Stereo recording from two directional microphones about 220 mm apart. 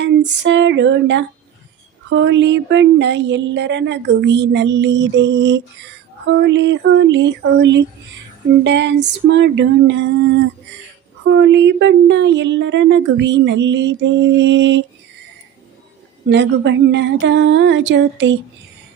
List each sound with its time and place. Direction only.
0.0 s music: 55° right (ahead or behind)
2.0 s speech: 55° right (ahead or behind)
16.3 s speech: 55° right (ahead or behind)